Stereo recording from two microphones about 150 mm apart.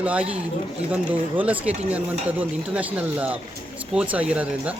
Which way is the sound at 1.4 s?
10° right (ahead or behind).